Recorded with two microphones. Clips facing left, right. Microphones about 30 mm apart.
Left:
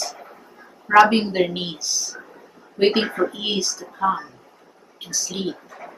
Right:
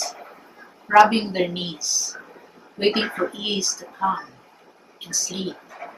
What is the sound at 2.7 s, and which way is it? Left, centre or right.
Speech, centre.